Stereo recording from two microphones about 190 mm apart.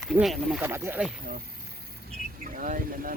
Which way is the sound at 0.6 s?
10° right (ahead or behind).